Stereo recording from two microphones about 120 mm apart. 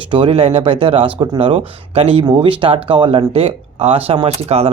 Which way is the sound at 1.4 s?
55° right (ahead or behind).